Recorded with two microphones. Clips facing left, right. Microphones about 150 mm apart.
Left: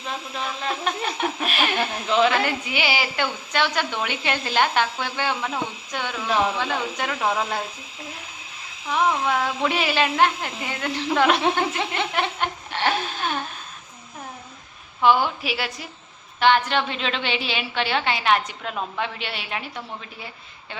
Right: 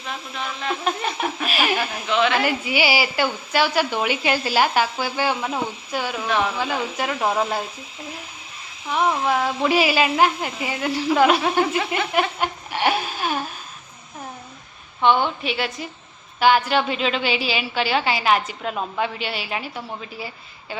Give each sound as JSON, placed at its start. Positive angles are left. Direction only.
{"t": 0.9, "sound": "a woman's voice", "side_deg": 0}
{"t": 2.0, "sound": "speech", "side_deg": 30}
{"t": 2.4, "sound": "a woman's voice", "side_deg": -5}
{"t": 8.9, "sound": "a woman's voice", "side_deg": 0}
{"t": 12.1, "sound": "a sound", "side_deg": -10}
{"t": 15.0, "sound": "a woman's voice", "side_deg": 5}